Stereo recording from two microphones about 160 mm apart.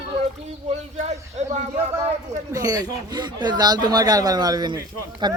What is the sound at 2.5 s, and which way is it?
Speech, 25° right (ahead or behind).